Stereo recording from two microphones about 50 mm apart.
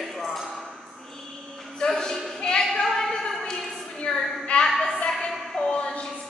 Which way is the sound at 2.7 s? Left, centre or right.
Centre.